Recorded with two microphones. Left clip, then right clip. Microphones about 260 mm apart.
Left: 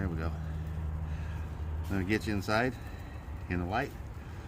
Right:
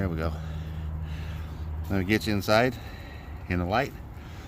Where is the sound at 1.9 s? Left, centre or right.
Right.